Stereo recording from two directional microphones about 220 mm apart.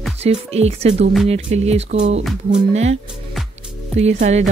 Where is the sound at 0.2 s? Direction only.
30° right (ahead or behind).